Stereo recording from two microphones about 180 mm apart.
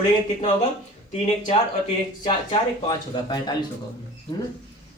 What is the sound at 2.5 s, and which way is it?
Speech, 25° left (ahead or behind).